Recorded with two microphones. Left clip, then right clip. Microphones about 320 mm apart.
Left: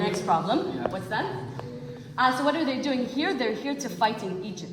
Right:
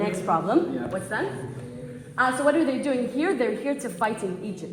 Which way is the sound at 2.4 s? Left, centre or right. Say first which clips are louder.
Right 4 dB; left.